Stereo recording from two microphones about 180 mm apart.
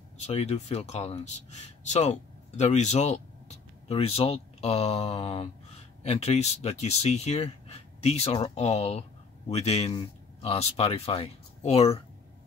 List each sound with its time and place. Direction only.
0.2 s speech: 35° left (ahead or behind)